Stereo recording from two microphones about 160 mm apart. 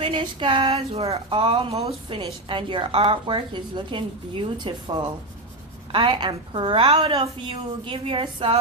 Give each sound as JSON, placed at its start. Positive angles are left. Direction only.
{"t": 0.0, "sound": "a woman's voice", "side_deg": -30}